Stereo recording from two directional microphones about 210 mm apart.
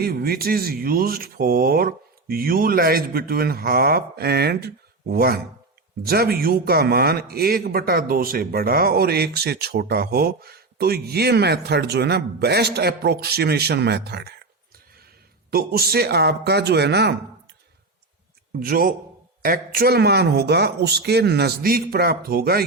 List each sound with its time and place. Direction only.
0.0 s a man's voice: 45° right (ahead or behind)
15.4 s a man's voice: 45° right (ahead or behind)
18.5 s a man's voice: 45° right (ahead or behind)